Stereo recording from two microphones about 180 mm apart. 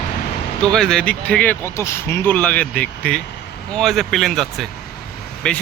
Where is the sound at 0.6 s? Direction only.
5° left (ahead or behind).